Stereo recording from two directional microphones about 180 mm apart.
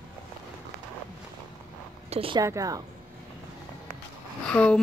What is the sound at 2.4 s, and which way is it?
Speech, 20° right (ahead or behind).